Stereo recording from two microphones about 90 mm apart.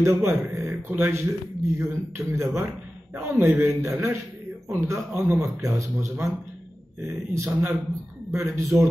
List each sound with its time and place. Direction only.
0.0 s a man's voice: 30° right (ahead or behind)